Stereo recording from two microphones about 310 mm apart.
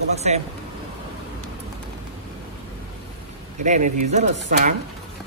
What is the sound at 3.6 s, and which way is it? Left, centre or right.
A man's voice, right.